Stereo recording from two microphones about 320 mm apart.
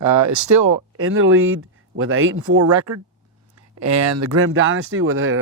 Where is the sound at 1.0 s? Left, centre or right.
Right.